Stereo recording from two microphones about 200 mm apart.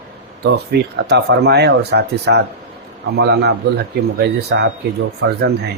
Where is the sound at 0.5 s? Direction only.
55° right (ahead or behind).